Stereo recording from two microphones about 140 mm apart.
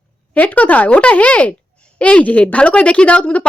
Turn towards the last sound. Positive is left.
turn(degrees=10)  # may be behind; listen again after turning